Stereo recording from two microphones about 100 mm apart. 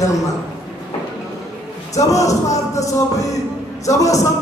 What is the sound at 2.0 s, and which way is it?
Music, 35° left (ahead or behind).